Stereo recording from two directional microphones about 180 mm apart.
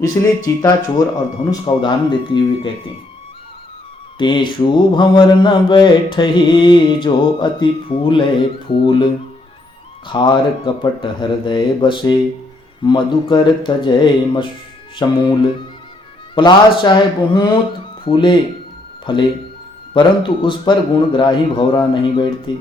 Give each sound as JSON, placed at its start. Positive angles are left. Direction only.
{"t": 0.0, "sound": "mantra", "side_deg": 20}
{"t": 4.2, "sound": "mantra", "side_deg": 25}
{"t": 10.1, "sound": "mantra", "side_deg": 25}